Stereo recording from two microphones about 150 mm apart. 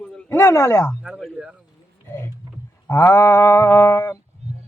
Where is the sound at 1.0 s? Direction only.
5° right (ahead or behind).